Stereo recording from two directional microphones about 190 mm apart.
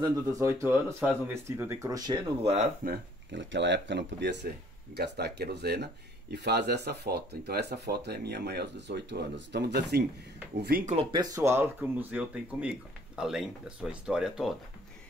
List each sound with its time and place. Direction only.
0.0 s speech: 15° right (ahead or behind)
2.5 s speech: 35° right (ahead or behind)
2.9 s speech: 65° right (ahead or behind)
10.9 s speech: 30° right (ahead or behind); by 14.5 s 5° right (ahead or behind)